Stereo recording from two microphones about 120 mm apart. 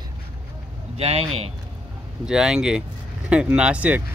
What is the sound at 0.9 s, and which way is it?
Speech, 60° right (ahead or behind).